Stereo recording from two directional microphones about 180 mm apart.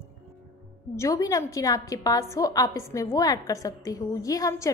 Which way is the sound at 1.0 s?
20° left (ahead or behind).